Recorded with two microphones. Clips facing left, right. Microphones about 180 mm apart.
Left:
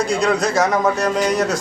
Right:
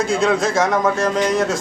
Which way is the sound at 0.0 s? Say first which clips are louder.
Right 1 dB; centre (ahead or behind).